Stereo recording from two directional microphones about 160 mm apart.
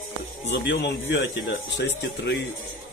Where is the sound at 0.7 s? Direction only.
90° left.